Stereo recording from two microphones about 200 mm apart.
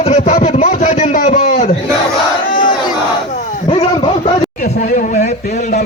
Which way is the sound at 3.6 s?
25° left (ahead or behind).